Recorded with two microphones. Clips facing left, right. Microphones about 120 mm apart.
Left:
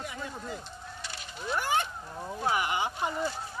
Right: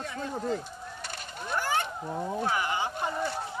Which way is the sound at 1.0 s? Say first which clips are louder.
Right 3 dB; 50° right (ahead or behind).